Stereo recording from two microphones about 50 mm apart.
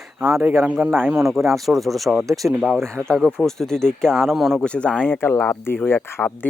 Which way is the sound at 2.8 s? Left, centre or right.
Right.